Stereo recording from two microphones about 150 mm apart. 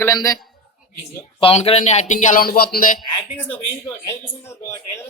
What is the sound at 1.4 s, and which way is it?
Speech, 40° left (ahead or behind).